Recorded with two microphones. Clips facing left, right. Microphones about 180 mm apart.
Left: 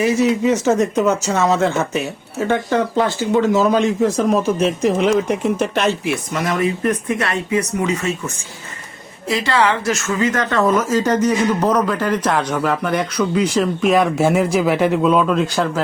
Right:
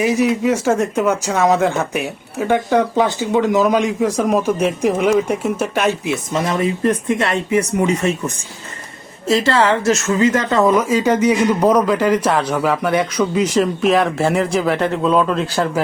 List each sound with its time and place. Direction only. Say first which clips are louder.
0.0 s a woman's voice: even; 15° right (ahead or behind)
6.3 s speech: right 2 dB; 25° right (ahead or behind)
9.2 s a woman's voice: right 2 dB; 25° right (ahead or behind); by 15.4 s centre (ahead or behind)